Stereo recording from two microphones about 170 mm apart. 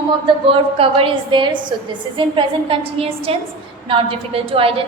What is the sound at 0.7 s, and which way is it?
A woman's voice, 35° right (ahead or behind).